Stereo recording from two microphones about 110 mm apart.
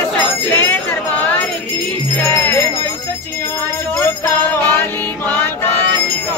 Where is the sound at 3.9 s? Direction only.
20° left (ahead or behind).